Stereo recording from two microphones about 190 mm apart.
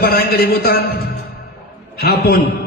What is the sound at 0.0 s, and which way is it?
A man's voice, 55° left (ahead or behind).